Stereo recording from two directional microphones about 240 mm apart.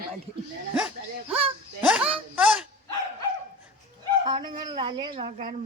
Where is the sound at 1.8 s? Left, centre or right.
Centre.